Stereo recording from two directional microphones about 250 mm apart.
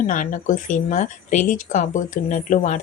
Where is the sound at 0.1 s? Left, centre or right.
Left.